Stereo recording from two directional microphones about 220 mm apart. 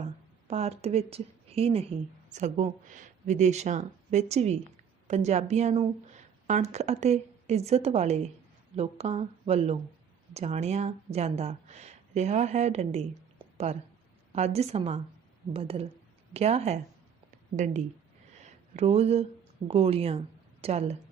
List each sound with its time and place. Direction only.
0.4 s a woman's voice: 30° right (ahead or behind)
14.3 s a woman's voice: 30° right (ahead or behind)
18.3 s a sound: 30° right (ahead or behind)
19.6 s a woman's voice: 25° right (ahead or behind)